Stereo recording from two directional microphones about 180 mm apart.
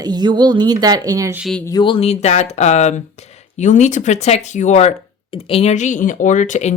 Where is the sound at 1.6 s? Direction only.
25° left (ahead or behind); by 6.7 s 40° left (ahead or behind).